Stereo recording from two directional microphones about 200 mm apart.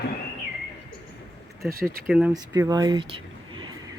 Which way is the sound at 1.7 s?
50° right (ahead or behind).